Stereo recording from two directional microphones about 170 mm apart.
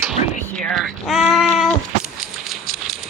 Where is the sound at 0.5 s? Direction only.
5° left (ahead or behind).